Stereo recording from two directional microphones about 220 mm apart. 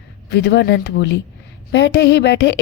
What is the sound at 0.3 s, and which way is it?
A woman's voice, 50° left (ahead or behind).